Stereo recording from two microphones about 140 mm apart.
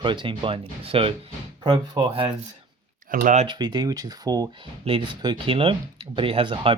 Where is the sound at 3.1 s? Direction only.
90° right.